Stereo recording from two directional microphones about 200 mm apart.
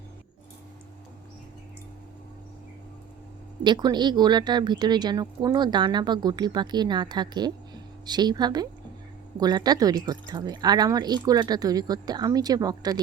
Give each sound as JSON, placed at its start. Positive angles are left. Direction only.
{"t": 3.6, "sound": "speech", "side_deg": -20}